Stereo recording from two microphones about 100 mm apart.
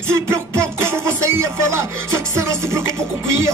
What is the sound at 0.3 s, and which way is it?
Music, 30° right (ahead or behind).